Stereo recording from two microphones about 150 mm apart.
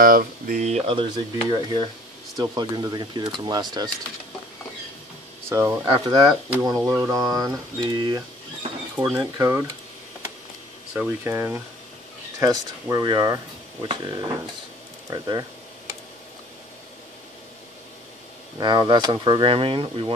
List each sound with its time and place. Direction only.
0.0 s speech: 70° right (ahead or behind); by 3.9 s 30° right (ahead or behind)
5.5 s speech: 20° right (ahead or behind)
5.9 s speech: 30° right (ahead or behind)
9.2 s speech: 20° right (ahead or behind)
11.0 s speech: 15° right (ahead or behind)
18.6 s speech: 30° right (ahead or behind)